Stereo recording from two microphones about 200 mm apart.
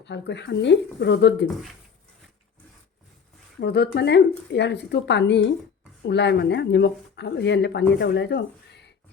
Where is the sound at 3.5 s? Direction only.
55° left (ahead or behind).